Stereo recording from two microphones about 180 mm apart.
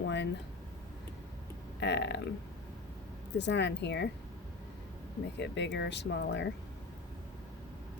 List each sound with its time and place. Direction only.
0.0 s a sound: 75° left (ahead or behind)
1.8 s speech: 75° left (ahead or behind)
3.3 s speech: 75° left (ahead or behind)
5.4 s speech: 70° left (ahead or behind)